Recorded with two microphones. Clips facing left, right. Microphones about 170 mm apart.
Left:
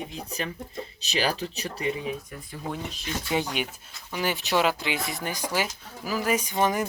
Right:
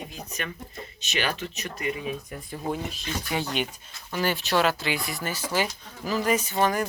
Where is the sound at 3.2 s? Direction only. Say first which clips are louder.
Left 1 dB; 20° left (ahead or behind).